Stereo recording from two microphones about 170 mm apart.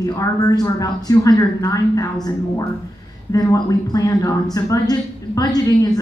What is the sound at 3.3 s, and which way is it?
A woman's voice, 20° left (ahead or behind).